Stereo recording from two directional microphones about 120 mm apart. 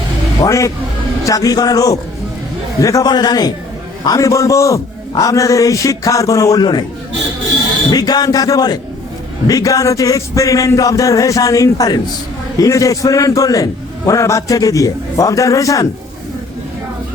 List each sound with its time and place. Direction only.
0.4 s a man's voice: 25° left (ahead or behind)
7.9 s a man's voice: 35° left (ahead or behind)